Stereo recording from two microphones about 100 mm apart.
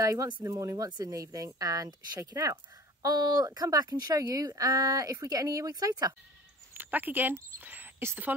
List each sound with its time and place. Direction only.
0.0 s speech: 35° right (ahead or behind)
6.7 s speech: 20° right (ahead or behind)